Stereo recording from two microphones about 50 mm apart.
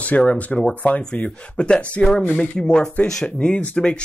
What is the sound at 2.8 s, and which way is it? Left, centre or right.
Speech, left.